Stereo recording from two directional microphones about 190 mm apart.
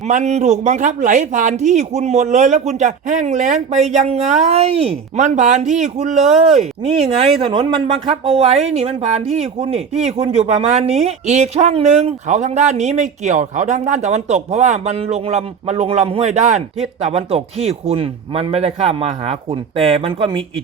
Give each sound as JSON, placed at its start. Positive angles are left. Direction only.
{"t": 0.1, "sound": "speech", "side_deg": -40}